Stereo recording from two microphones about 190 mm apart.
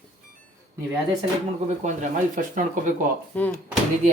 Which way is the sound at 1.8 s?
40° right (ahead or behind).